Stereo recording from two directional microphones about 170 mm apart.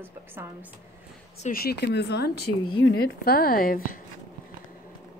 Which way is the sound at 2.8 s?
65° left (ahead or behind).